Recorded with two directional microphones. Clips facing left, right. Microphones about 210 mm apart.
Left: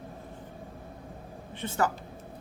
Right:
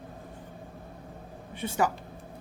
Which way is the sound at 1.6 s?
10° right (ahead or behind).